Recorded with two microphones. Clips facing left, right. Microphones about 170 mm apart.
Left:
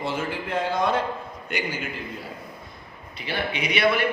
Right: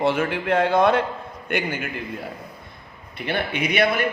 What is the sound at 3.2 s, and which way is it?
Speech, 55° right (ahead or behind).